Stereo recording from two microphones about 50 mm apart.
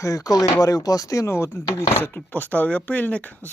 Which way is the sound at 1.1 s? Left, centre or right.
Left.